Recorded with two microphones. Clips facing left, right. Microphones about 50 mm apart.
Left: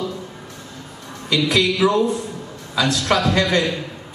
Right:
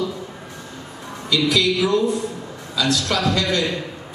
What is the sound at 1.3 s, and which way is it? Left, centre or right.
A woman's voice, left.